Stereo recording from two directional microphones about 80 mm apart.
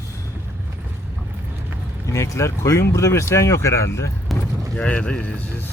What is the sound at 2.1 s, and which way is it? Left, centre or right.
Speech, left.